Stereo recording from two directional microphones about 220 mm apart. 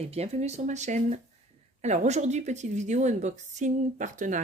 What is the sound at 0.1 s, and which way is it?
A woman's voice, 30° right (ahead or behind).